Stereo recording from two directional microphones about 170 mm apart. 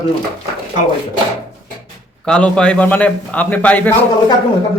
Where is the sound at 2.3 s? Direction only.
5° left (ahead or behind).